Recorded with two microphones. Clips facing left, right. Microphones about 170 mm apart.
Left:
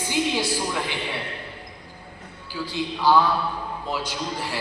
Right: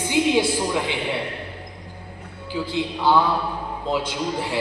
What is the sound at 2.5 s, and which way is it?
A woman's voice, 20° right (ahead or behind).